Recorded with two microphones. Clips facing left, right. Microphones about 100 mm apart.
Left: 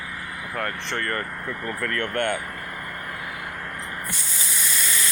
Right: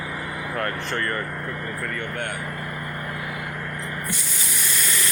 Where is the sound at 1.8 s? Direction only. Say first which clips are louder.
Left 7 dB; 85° left.